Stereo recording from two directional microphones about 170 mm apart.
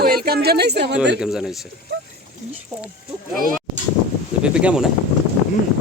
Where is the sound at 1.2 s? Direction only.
Centre (ahead or behind).